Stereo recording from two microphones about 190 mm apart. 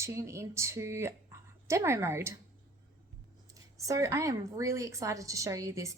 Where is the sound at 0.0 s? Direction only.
15° right (ahead or behind).